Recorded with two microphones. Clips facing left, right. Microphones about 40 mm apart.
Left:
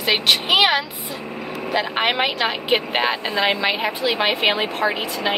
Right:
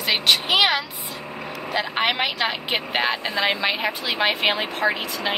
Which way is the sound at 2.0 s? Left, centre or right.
Centre.